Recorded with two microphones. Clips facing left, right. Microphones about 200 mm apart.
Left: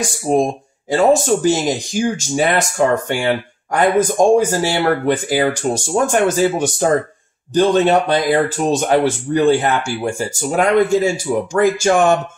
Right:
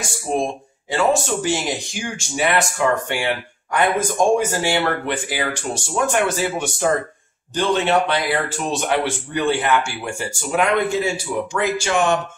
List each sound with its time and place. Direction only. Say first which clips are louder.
0.3 s speech: left 6 dB; 40° left (ahead or behind)